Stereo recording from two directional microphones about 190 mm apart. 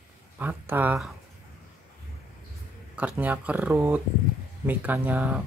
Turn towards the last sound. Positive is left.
turn(degrees=-10)  # may be behind; listen again after turning